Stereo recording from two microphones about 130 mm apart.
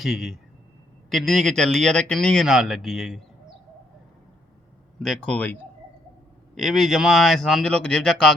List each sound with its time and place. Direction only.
0.0 s speech: centre (ahead or behind)
4.9 s speech: 5° left (ahead or behind)
6.6 s speech: centre (ahead or behind)